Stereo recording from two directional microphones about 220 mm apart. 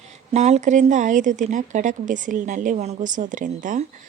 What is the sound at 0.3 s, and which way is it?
Speech, 30° right (ahead or behind).